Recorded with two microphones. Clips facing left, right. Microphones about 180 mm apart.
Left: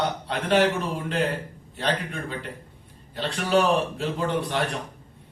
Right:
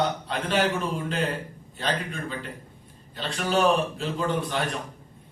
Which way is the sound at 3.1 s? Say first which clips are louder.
Left 3 dB; 60° left (ahead or behind).